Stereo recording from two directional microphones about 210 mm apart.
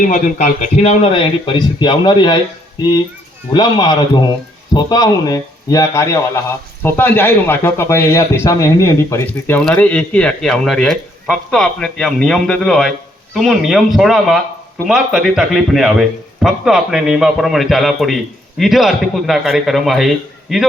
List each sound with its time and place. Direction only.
0.1 s speech: 40° left (ahead or behind); by 2.4 s 20° left (ahead or behind)
3.5 s a man's voice: 20° left (ahead or behind); by 20.7 s centre (ahead or behind)